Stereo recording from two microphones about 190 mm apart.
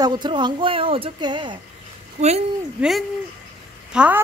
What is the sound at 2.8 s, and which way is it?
Speech, 5° right (ahead or behind).